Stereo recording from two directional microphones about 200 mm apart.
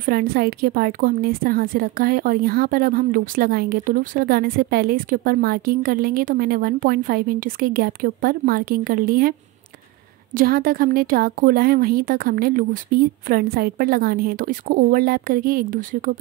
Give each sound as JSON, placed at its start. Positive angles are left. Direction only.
{"t": 0.0, "sound": "a woman's voice", "side_deg": -45}
{"t": 10.3, "sound": "a woman's voice", "side_deg": -45}